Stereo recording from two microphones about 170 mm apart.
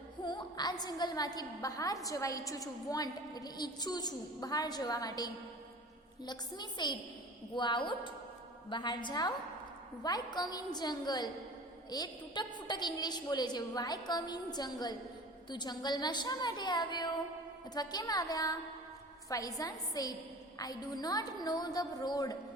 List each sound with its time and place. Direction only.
0.3 s a woman's voice: 25° left (ahead or behind)